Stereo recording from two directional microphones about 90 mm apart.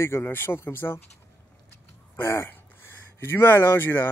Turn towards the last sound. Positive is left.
turn(degrees=25)  # may be behind; listen again after turning